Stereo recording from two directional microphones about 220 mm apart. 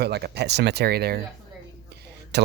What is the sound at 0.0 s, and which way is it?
Speech, 50° right (ahead or behind).